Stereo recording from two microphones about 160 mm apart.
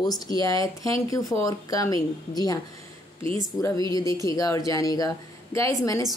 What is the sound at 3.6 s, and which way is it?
Speech, 20° left (ahead or behind).